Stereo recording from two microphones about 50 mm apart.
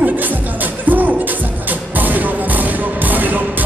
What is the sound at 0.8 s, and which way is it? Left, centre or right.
Music, right.